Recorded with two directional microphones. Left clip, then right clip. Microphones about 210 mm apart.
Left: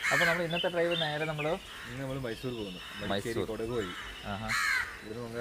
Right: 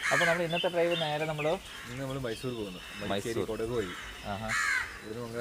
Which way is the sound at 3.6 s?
5° right (ahead or behind).